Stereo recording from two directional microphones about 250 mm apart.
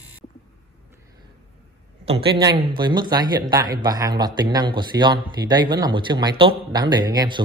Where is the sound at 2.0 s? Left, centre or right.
Right.